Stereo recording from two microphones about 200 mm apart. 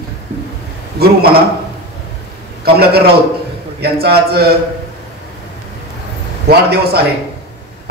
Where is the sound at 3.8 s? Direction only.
55° right (ahead or behind).